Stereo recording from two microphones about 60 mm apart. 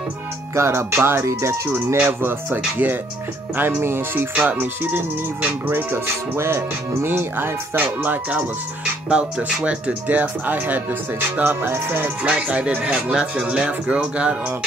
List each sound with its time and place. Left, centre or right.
0.6 s speech: right
2.0 s music: right
4.4 s speech: right
5.4 s music: right
9.1 s speech: centre; by 12.1 s right
12.2 s speech: centre